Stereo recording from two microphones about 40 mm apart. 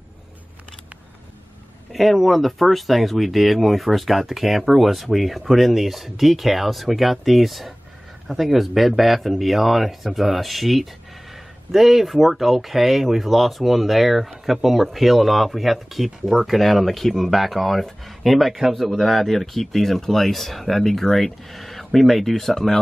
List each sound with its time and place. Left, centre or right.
1.9 s speech: centre